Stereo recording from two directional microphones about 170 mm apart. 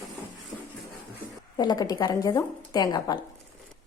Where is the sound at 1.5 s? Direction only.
25° left (ahead or behind).